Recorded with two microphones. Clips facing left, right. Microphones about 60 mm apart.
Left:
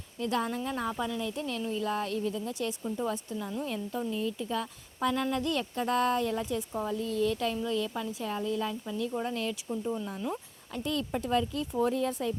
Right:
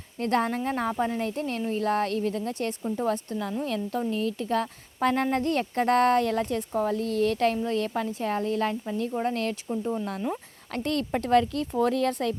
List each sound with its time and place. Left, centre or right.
0.2 s speech: right
9.6 s speech: right
10.7 s speech: right